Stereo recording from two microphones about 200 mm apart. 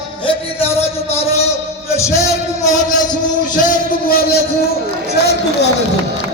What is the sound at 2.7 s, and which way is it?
A man's voice, 40° left (ahead or behind).